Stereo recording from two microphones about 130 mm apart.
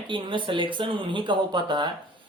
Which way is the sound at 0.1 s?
40° right (ahead or behind).